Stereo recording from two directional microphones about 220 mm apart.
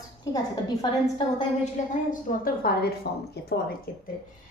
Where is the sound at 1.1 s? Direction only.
35° left (ahead or behind).